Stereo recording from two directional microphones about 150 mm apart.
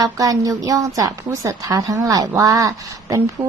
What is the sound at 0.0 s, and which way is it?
A woman's voice, 25° right (ahead or behind).